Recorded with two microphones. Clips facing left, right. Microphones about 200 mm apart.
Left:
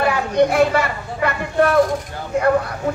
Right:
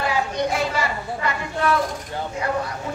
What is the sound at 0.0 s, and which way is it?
Speech, 60° left (ahead or behind).